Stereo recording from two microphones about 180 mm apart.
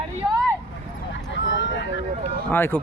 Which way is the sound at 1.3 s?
90° left.